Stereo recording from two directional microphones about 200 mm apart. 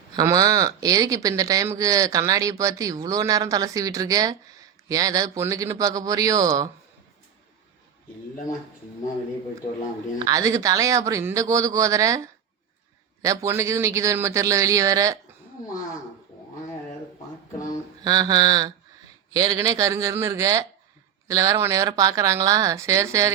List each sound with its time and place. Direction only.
0.2 s speech: 15° right (ahead or behind)
10.2 s speech: 15° right (ahead or behind)
18.0 s mantra: 20° right (ahead or behind)
19.3 s speech: 15° right (ahead or behind)